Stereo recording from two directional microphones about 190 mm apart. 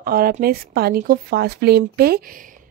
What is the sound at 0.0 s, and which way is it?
Speech, 50° right (ahead or behind).